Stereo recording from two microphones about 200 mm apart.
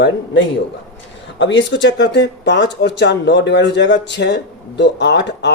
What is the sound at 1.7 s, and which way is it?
Speech, 60° left (ahead or behind).